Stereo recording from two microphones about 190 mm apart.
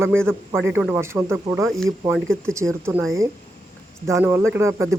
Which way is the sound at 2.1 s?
5° left (ahead or behind).